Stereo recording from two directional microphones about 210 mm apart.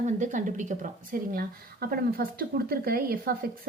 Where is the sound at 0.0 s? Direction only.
35° right (ahead or behind).